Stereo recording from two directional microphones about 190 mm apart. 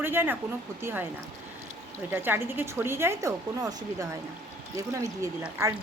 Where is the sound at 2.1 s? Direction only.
10° right (ahead or behind).